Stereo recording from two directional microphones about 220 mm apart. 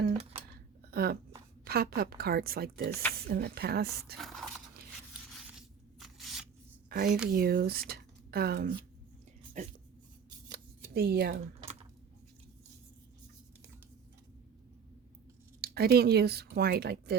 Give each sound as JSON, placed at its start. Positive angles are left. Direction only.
{"t": 0.9, "sound": "speech", "side_deg": -45}
{"t": 4.2, "sound": "speech", "side_deg": 0}
{"t": 5.3, "sound": "scrape", "side_deg": 0}
{"t": 6.9, "sound": "a woman's voice", "side_deg": -40}
{"t": 9.6, "sound": "dog", "side_deg": -30}
{"t": 10.5, "sound": "shuffling cards", "side_deg": -45}
{"t": 15.6, "sound": "speech", "side_deg": -45}